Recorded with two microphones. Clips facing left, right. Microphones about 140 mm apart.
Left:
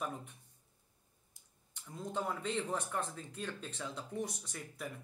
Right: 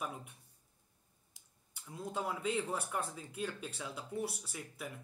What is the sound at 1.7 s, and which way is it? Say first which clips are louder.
Speech: even; 5° right (ahead or behind).